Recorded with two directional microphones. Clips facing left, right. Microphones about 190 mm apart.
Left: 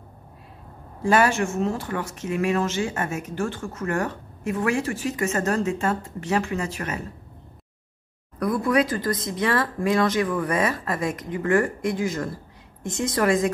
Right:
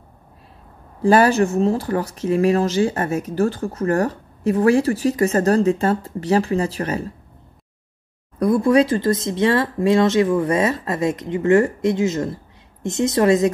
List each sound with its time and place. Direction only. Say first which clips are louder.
1.0 s speech: right 6 dB; 35° right (ahead or behind)
8.4 s speech: right 6 dB; 25° right (ahead or behind)